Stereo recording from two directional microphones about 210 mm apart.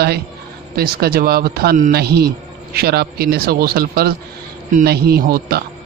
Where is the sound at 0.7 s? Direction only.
45° right (ahead or behind).